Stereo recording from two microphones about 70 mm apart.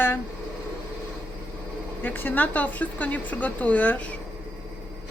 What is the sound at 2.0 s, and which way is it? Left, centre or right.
Speech, left.